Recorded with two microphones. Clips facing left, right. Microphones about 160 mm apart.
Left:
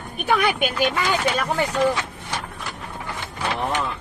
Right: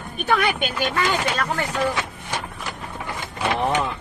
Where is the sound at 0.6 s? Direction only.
10° left (ahead or behind).